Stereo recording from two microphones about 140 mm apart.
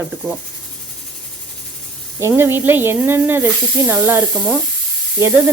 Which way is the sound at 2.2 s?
20° right (ahead or behind).